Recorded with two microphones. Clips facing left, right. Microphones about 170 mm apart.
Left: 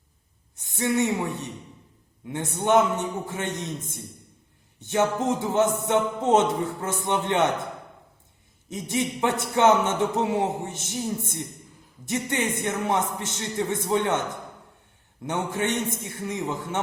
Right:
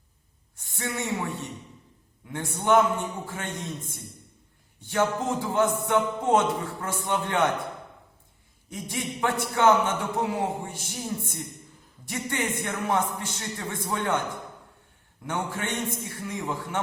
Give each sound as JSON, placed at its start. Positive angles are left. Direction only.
{"t": 0.5, "sound": "speech", "side_deg": 20}
{"t": 2.3, "sound": "a man's voice", "side_deg": 20}
{"t": 4.8, "sound": "a man's voice", "side_deg": 20}
{"t": 8.7, "sound": "a man's voice", "side_deg": 20}
{"t": 15.3, "sound": "a man's voice", "side_deg": 20}